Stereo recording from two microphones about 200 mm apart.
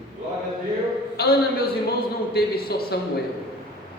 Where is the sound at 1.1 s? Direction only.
50° left (ahead or behind).